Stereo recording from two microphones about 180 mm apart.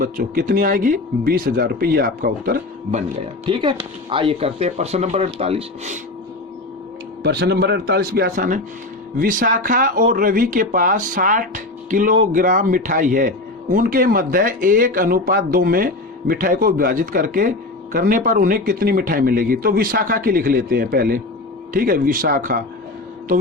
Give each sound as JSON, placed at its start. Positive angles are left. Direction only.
{"t": 0.0, "sound": "speech", "side_deg": -50}
{"t": 3.4, "sound": "speech", "side_deg": -30}
{"t": 7.2, "sound": "speech", "side_deg": -65}